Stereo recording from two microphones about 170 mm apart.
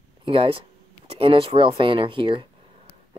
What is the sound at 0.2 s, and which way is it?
Speech, 30° right (ahead or behind).